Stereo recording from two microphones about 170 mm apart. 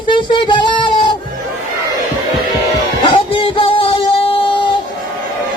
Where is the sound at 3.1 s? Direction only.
30° left (ahead or behind).